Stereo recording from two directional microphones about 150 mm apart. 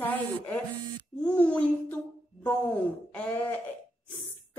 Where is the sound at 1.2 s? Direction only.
10° left (ahead or behind).